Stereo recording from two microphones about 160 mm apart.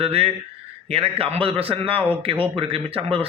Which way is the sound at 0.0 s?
40° right (ahead or behind).